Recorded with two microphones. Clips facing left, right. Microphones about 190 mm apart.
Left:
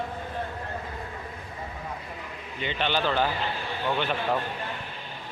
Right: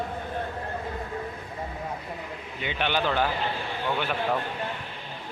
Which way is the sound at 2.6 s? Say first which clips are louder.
Even; 10° right (ahead or behind).